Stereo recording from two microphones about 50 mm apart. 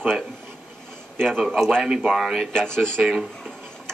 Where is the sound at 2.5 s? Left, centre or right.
Centre.